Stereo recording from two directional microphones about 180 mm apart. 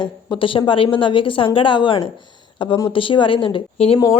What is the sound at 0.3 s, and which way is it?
A woman's voice, 30° left (ahead or behind).